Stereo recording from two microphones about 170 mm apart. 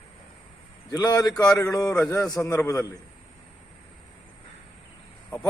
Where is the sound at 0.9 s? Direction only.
20° left (ahead or behind).